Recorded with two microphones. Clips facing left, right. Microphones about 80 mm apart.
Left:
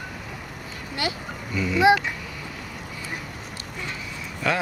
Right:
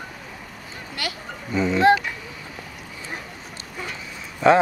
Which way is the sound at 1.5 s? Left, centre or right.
Right.